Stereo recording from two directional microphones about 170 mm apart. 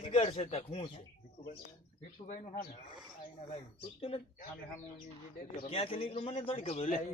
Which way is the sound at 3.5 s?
35° left (ahead or behind).